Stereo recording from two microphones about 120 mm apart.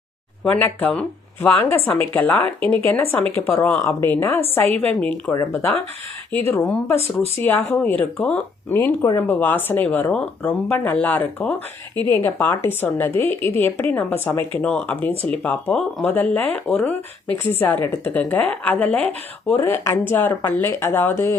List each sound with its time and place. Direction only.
0.4 s speech: 15° left (ahead or behind)
5.3 s speech: 25° left (ahead or behind)
8.7 s speech: 20° left (ahead or behind)